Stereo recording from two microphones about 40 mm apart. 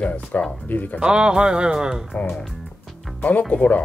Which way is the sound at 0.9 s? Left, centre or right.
Right.